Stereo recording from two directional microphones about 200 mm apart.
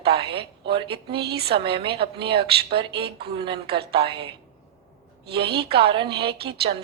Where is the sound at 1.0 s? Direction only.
55° right (ahead or behind).